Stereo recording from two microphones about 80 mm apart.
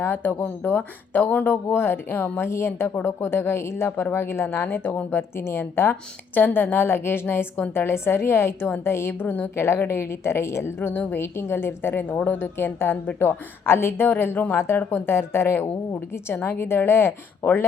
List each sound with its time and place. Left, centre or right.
0.0 s speech: left